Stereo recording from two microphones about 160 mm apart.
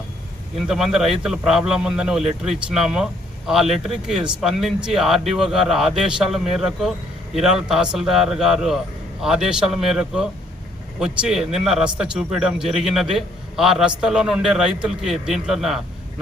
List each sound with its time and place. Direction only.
0.7 s speech: 5° right (ahead or behind)